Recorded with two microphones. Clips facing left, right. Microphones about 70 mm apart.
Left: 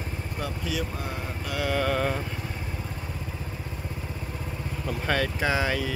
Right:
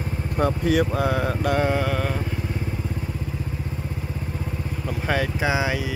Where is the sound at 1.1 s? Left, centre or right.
Right.